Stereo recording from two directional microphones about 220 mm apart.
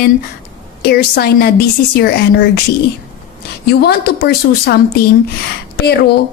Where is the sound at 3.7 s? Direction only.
45° left (ahead or behind).